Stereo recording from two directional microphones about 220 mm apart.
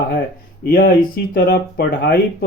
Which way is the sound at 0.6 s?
40° left (ahead or behind).